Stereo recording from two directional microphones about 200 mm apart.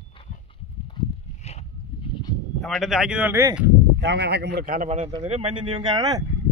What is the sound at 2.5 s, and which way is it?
Speech, centre (ahead or behind).